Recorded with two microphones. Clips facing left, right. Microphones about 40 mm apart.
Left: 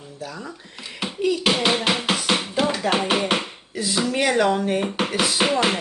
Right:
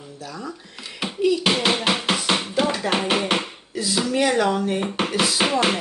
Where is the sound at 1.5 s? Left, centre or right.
Centre.